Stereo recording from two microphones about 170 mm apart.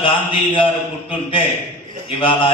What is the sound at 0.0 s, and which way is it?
A man's voice, 30° left (ahead or behind).